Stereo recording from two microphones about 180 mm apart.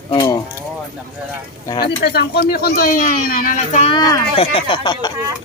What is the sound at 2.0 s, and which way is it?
Speech, 65° left (ahead or behind).